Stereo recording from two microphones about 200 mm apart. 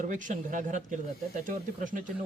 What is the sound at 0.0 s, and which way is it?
Speech, 40° right (ahead or behind).